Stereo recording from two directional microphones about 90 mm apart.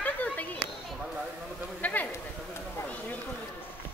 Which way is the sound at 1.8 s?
20° left (ahead or behind).